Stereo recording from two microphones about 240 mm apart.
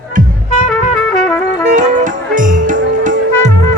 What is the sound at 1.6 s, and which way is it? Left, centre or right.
Music, right.